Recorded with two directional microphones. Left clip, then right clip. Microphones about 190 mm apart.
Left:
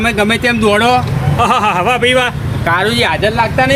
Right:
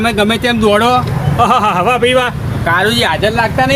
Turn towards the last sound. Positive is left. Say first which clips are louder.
# even
turn(degrees=20)  # may be behind; listen again after turning